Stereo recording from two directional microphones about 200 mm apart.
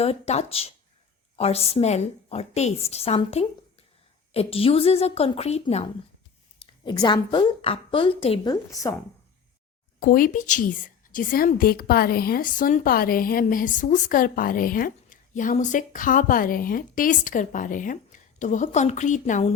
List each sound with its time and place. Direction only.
0.0 s a woman's voice: 30° left (ahead or behind)
8.7 s speech: 15° left (ahead or behind)
10.0 s a woman's voice: 45° left (ahead or behind)